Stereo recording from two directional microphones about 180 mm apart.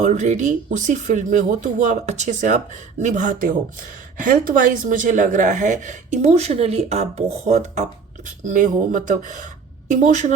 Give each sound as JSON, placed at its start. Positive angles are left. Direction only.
{"t": 0.0, "sound": "speech", "side_deg": -40}